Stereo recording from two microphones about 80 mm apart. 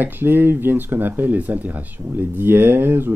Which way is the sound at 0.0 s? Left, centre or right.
Right.